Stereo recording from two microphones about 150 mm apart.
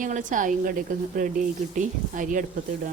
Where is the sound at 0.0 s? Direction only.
60° right (ahead or behind).